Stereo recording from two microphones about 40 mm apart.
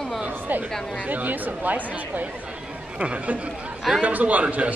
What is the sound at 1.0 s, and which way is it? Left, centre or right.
A man's voice, right.